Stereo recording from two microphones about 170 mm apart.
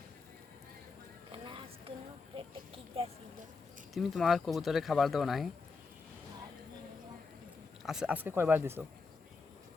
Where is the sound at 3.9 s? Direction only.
Centre (ahead or behind).